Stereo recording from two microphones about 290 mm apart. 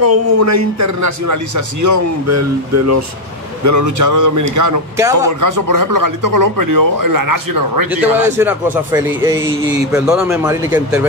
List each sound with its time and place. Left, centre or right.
0.0 s a man's voice: right
3.6 s speech: right
7.9 s speech: centre